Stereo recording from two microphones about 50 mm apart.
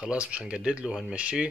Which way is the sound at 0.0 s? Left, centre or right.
Right.